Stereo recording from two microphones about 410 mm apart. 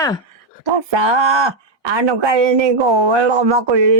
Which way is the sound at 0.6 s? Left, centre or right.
Right.